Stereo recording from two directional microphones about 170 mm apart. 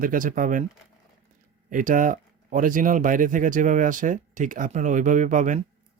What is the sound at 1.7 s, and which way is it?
Speech, 50° right (ahead or behind).